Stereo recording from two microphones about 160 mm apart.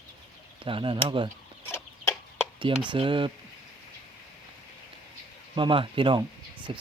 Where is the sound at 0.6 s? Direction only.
35° right (ahead or behind).